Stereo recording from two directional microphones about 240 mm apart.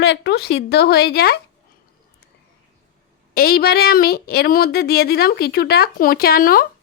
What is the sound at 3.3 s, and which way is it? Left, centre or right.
A woman's voice, left.